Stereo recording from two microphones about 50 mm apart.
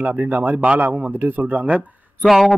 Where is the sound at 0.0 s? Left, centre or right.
Right.